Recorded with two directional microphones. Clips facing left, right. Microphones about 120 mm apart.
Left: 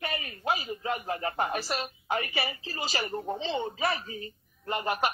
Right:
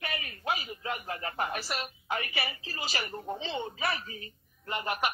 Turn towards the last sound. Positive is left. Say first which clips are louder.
# left 3 dB
turn(degrees=35)  # may be behind; listen again after turning